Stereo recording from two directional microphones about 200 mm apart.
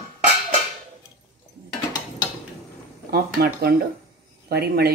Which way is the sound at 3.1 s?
50° right (ahead or behind).